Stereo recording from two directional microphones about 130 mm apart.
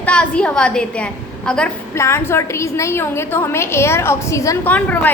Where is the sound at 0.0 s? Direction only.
10° left (ahead or behind).